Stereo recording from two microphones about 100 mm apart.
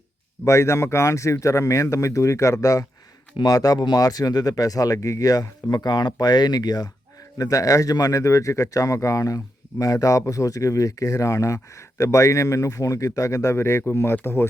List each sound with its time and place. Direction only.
0.4 s speech: 30° left (ahead or behind)